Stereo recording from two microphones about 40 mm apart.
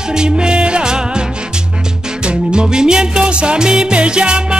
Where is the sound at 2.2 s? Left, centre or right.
Right.